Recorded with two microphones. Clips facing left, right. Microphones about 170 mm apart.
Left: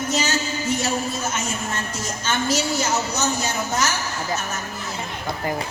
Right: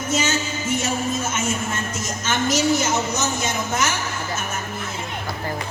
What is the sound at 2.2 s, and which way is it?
A woman's voice, 30° left (ahead or behind).